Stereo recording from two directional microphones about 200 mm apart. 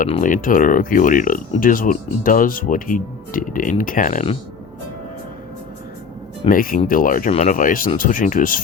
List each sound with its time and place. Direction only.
0.1 s speech: 40° left (ahead or behind)
6.5 s speech: 45° left (ahead or behind)